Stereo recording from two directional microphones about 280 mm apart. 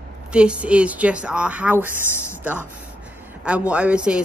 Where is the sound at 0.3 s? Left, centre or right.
Centre.